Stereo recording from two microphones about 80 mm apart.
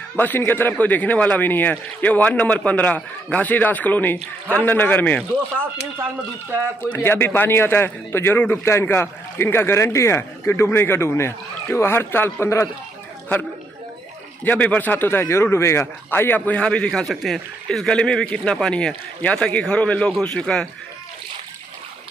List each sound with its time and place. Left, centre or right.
0.5 s a man's voice: left
7.0 s a man's voice: left
14.4 s speech: centre